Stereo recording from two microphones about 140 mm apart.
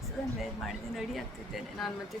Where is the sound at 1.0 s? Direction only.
Centre (ahead or behind).